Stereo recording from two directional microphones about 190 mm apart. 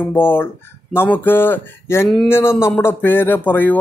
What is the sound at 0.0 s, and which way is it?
Speech, 10° left (ahead or behind).